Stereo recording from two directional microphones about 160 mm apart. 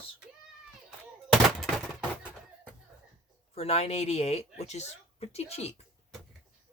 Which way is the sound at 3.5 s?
40° left (ahead or behind).